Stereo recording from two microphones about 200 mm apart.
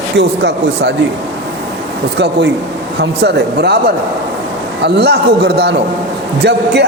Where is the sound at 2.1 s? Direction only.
55° right (ahead or behind).